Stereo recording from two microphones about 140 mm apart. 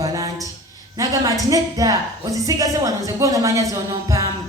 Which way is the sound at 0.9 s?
25° right (ahead or behind).